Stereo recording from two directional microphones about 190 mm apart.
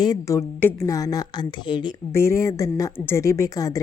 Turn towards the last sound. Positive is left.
turn(degrees=20)  # may be behind; listen again after turning